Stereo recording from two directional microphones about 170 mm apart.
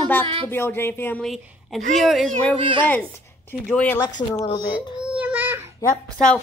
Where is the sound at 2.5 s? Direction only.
30° right (ahead or behind).